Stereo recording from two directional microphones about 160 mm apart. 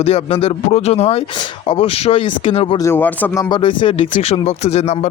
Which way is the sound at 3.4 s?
30° left (ahead or behind).